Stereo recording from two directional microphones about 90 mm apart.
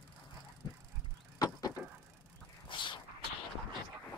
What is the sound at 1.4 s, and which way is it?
Vehicle, 45° left (ahead or behind).